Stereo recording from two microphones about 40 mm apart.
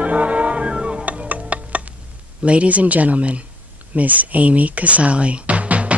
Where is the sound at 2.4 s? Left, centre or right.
Right.